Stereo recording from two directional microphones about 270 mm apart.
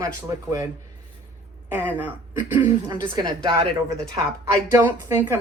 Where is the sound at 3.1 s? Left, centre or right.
Centre.